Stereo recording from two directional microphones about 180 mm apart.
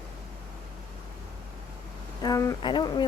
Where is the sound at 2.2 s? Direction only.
20° left (ahead or behind).